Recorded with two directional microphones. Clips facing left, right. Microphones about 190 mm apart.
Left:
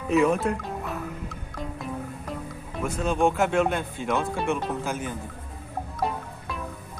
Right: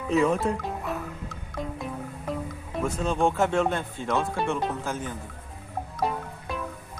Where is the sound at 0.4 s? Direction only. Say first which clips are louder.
Even; centre (ahead or behind).